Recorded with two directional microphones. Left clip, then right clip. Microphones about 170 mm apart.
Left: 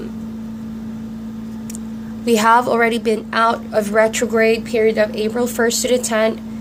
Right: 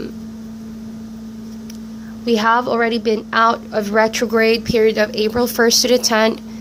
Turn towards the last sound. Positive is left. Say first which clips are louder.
# right 2 dB
turn(degrees=-30)  # may be behind; listen again after turning